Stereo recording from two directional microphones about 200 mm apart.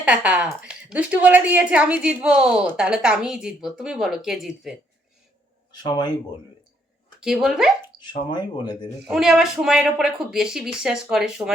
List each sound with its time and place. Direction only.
0.0 s speech: 5° right (ahead or behind)
5.7 s speech: 20° left (ahead or behind)
7.2 s speech: centre (ahead or behind)
7.9 s dog: 50° right (ahead or behind)
8.3 s speech: 20° left (ahead or behind)
9.0 s speech: centre (ahead or behind)